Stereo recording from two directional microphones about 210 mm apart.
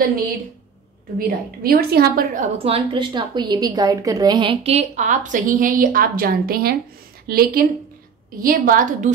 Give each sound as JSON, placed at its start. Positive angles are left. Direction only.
{"t": 1.1, "sound": "a woman's voice", "side_deg": -45}
{"t": 2.6, "sound": "a woman's voice", "side_deg": -25}